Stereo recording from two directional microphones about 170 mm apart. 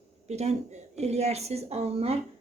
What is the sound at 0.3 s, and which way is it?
A woman's voice, 40° right (ahead or behind).